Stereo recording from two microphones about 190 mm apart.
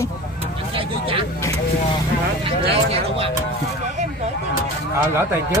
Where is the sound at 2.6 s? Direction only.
30° right (ahead or behind).